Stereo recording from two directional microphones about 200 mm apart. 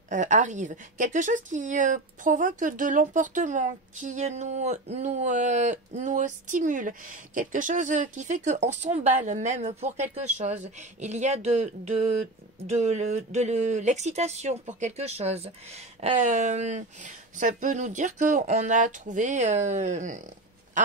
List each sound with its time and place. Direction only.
0.1 s a woman's voice: 40° right (ahead or behind)